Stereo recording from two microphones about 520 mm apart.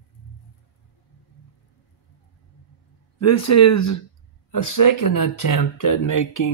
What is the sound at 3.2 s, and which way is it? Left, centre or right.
Speech, left.